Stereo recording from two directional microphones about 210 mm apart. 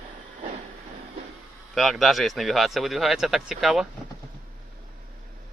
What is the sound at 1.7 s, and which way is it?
Speech, centre (ahead or behind).